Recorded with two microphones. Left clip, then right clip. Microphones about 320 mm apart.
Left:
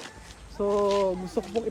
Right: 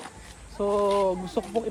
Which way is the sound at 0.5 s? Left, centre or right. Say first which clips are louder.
Right 1 dB; centre.